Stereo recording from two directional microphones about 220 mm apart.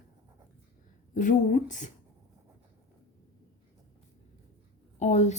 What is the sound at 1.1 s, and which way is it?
Speech, 35° left (ahead or behind).